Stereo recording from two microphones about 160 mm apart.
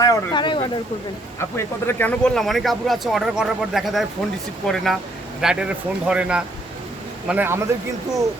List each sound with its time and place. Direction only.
0.0 s speech: 25° left (ahead or behind)
1.4 s a man's voice: 15° left (ahead or behind); by 7.7 s 15° right (ahead or behind)